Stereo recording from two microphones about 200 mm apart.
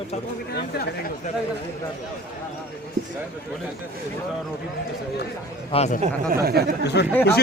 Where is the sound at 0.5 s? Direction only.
50° left (ahead or behind).